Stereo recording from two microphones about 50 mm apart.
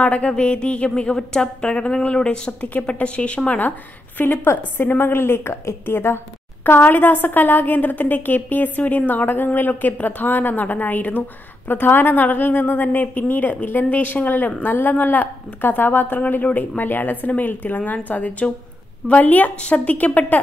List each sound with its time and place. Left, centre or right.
0.0 s a woman's voice: left
3.4 s a woman's voice: left
4.5 s a woman's voice: left